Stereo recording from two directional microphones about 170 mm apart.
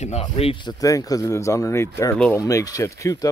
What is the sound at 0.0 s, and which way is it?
Speech, 35° left (ahead or behind).